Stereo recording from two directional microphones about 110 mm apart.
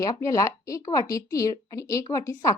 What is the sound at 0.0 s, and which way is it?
A woman's voice, 30° left (ahead or behind).